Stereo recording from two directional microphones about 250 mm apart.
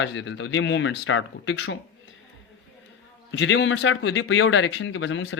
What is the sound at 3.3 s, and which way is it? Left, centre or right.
A man's voice, left.